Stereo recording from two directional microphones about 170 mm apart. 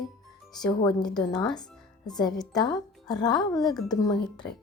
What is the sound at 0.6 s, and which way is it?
Speech, 25° left (ahead or behind).